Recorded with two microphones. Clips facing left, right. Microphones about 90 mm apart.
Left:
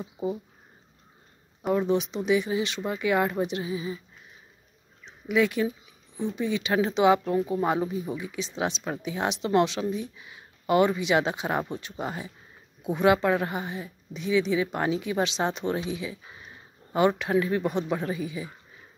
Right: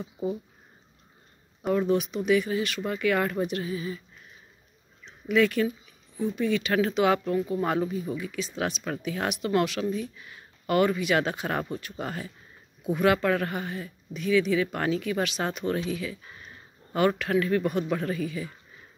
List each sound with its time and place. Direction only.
0.0 s speech: 20° left (ahead or behind)
1.7 s speech: 20° left (ahead or behind)
5.0 s a sound: 15° left (ahead or behind)
6.1 s speech: 20° left (ahead or behind)